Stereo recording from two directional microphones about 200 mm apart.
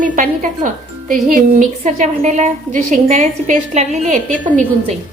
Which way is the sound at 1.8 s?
35° right (ahead or behind).